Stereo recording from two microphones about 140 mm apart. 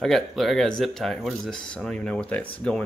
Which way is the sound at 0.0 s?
Centre (ahead or behind).